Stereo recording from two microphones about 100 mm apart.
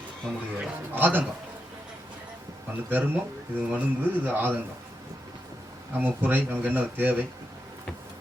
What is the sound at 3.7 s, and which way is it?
Speech, 15° right (ahead or behind).